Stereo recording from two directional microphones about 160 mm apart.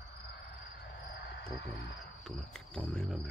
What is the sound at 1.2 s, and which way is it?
Cricket, 90° left.